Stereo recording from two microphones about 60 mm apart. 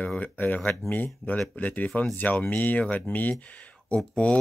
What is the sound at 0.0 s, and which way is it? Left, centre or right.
Speech, left.